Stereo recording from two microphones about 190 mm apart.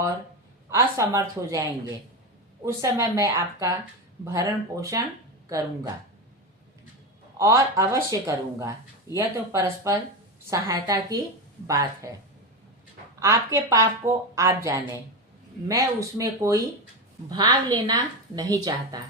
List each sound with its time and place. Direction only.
0.7 s a woman's voice: 15° right (ahead or behind)
7.3 s a woman's voice: 15° right (ahead or behind)
13.1 s a woman's voice: 15° right (ahead or behind)